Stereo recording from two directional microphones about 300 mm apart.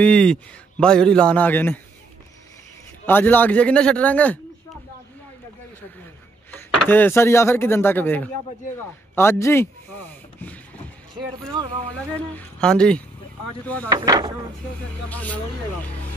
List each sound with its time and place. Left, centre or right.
0.0 s a man's voice: centre
3.1 s a man's voice: centre
6.5 s speech: centre
11.5 s speech: centre
12.4 s a man's voice: centre
13.8 s speech: centre
15.0 s a man's voice: centre